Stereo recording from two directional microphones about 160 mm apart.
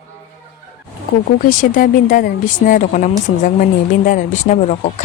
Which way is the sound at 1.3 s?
60° left (ahead or behind).